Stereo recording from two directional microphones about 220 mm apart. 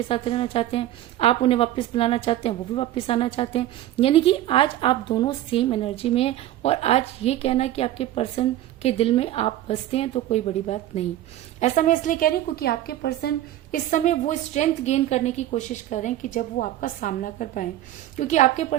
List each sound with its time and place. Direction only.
0.1 s a woman's voice: 25° left (ahead or behind)